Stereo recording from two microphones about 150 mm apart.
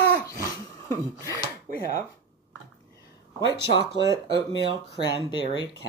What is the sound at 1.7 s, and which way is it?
Speech, 55° right (ahead or behind).